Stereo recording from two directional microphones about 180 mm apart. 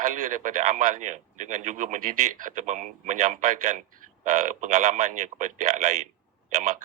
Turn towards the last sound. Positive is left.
turn(degrees=-40)  # may be behind; listen again after turning